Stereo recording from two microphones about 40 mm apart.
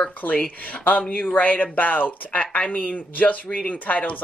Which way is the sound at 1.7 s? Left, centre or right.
Left.